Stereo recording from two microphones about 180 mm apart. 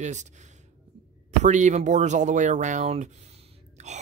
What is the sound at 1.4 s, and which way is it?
Speech, 40° right (ahead or behind).